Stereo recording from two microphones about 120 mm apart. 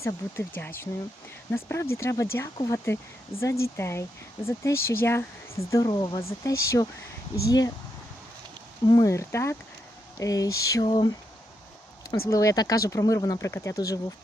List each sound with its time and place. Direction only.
0.0 s speech: 20° left (ahead or behind)
5.8 s speech: 35° left (ahead or behind)
6.4 s speech: 25° left (ahead or behind)
8.9 s speech: 30° left (ahead or behind)
10.8 s speech: 40° left (ahead or behind)
12.3 s speech: 30° left (ahead or behind)